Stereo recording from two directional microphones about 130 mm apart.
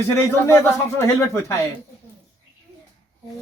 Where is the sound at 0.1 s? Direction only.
20° left (ahead or behind).